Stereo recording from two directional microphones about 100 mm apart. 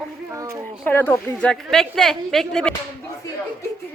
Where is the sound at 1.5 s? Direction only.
5° left (ahead or behind).